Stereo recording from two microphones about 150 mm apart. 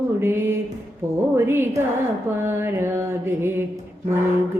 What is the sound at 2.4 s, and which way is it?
Mantra, 15° right (ahead or behind).